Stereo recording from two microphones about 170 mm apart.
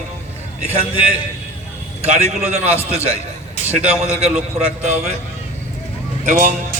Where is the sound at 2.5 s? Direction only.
40° right (ahead or behind).